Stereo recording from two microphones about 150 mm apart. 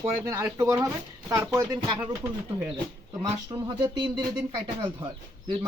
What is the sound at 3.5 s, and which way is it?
Speech, 25° right (ahead or behind).